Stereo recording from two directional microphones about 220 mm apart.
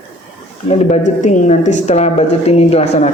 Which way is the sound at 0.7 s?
30° left (ahead or behind).